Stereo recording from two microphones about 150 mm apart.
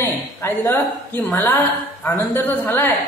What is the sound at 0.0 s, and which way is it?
A woman's voice, 15° left (ahead or behind).